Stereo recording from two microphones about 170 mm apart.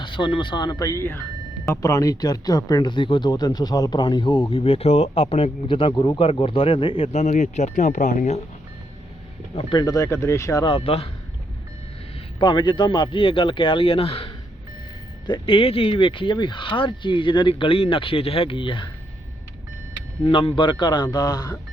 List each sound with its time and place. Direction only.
0.0 s speech: 30° left (ahead or behind); by 8.4 s 45° left (ahead or behind)
9.6 s speech: 25° left (ahead or behind)
10.7 s speech: 35° left (ahead or behind)
12.4 s speech: 25° left (ahead or behind)
20.2 s speech: 30° left (ahead or behind)